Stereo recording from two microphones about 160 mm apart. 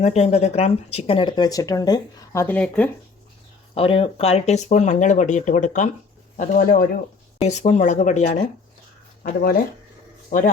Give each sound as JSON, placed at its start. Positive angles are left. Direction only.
{"t": 0.0, "sound": "speech", "side_deg": 40}
{"t": 3.8, "sound": "speech", "side_deg": 35}
{"t": 7.4, "sound": "speech", "side_deg": 45}
{"t": 9.2, "sound": "speech", "side_deg": 65}
{"t": 10.2, "sound": "a man's voice", "side_deg": 55}